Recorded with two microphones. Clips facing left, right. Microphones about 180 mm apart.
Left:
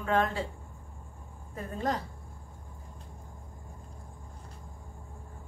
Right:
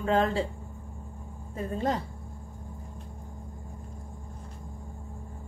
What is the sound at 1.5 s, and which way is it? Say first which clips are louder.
Speech: right 3 dB; 25° right (ahead or behind).